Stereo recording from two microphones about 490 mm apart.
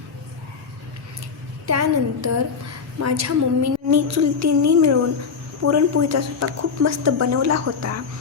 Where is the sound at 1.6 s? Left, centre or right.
Right.